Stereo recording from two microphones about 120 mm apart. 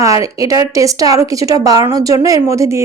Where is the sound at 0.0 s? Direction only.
25° right (ahead or behind).